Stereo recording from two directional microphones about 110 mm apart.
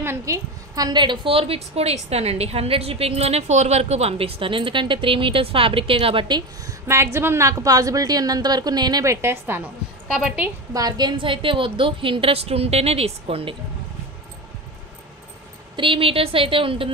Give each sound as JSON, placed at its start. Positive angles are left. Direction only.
{"t": 0.0, "sound": "a woman's voice", "side_deg": -25}
{"t": 6.9, "sound": "a woman's voice", "side_deg": -25}
{"t": 9.0, "sound": "a woman's voice", "side_deg": -25}
{"t": 10.1, "sound": "a woman's voice", "side_deg": -10}
{"t": 10.7, "sound": "a woman's voice", "side_deg": -35}
{"t": 15.7, "sound": "a woman's voice", "side_deg": -50}